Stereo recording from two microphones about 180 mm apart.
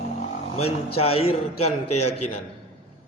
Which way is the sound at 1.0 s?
35° left (ahead or behind).